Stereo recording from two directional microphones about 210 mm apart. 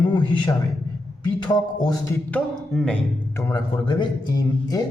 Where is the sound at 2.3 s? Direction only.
5° left (ahead or behind).